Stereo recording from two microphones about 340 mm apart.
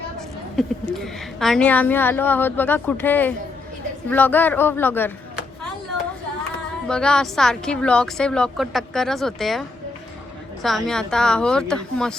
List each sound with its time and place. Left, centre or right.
0.5 s a woman's voice: centre
6.8 s a woman's voice: centre